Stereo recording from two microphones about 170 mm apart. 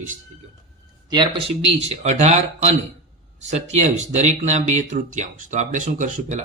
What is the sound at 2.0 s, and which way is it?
Speech, 40° right (ahead or behind).